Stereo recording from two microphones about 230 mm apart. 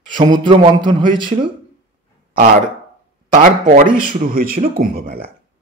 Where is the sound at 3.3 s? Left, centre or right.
Right.